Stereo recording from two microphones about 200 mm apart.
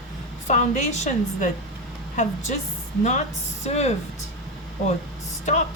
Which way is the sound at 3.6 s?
35° left (ahead or behind).